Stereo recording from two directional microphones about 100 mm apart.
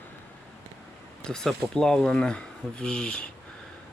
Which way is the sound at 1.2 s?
5° left (ahead or behind).